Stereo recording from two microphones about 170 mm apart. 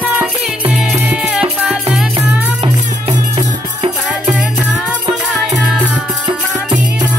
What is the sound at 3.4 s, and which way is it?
Music, 20° right (ahead or behind).